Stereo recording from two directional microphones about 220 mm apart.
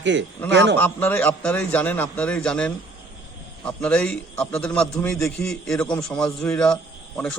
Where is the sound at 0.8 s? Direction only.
10° left (ahead or behind).